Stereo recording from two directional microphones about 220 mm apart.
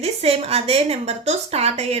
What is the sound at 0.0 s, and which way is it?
A woman's voice, 30° right (ahead or behind).